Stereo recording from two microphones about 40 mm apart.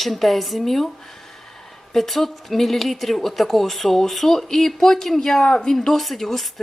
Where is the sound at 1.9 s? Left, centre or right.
Centre.